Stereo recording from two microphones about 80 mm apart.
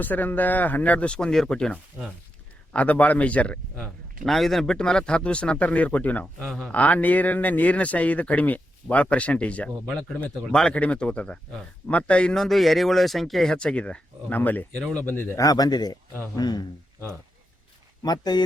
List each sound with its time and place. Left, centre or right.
0.0 s a man's voice: left
4.3 s a man's voice: centre
6.4 s speech: centre
6.7 s a man's voice: centre
15.4 s speech: left
18.0 s speech: left